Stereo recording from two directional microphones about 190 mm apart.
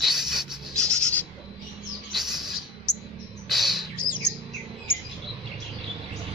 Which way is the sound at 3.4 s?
Centre (ahead or behind).